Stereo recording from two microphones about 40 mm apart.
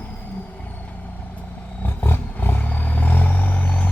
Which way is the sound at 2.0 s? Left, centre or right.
Left.